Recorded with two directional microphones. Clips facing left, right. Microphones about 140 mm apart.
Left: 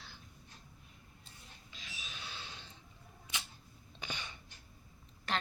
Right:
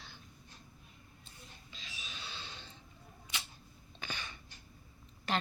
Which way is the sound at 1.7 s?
5° left (ahead or behind).